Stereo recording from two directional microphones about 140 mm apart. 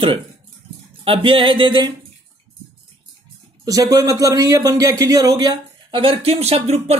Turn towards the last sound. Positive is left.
turn(degrees=-50)  # may be behind; listen again after turning